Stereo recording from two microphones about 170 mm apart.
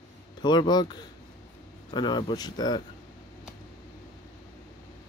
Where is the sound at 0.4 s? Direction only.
25° left (ahead or behind).